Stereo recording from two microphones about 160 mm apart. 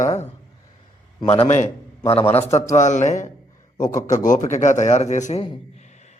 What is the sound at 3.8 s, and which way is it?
Mantra, 55° left (ahead or behind).